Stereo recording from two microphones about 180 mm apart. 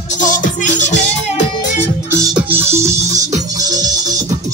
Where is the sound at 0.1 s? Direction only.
45° left (ahead or behind).